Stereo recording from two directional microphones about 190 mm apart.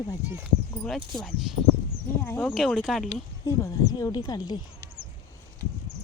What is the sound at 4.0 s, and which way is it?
Speech, 20° left (ahead or behind).